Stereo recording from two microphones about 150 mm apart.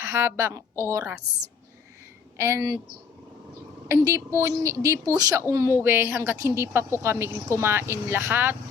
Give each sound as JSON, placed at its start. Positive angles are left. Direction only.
{"t": 0.0, "sound": "a woman's voice", "side_deg": -15}
{"t": 2.4, "sound": "a woman's voice", "side_deg": -20}
{"t": 3.8, "sound": "a woman's voice", "side_deg": -20}